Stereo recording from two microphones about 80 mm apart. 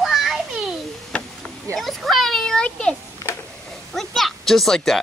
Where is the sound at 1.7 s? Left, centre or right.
Centre.